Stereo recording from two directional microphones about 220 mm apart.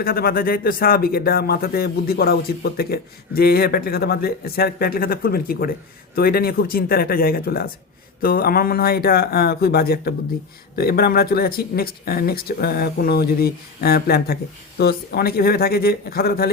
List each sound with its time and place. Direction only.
0.0 s speech: 45° left (ahead or behind)